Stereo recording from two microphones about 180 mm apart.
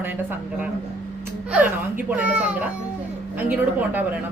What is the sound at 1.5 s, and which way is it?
A woman's voice, 10° right (ahead or behind).